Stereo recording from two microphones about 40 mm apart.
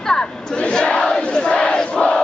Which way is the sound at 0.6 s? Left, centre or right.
Left.